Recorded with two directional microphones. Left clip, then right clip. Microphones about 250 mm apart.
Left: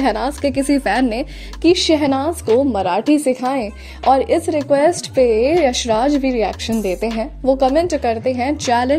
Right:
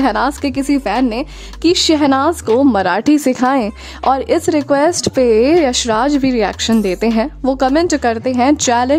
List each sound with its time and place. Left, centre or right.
0.0 s a woman's voice: centre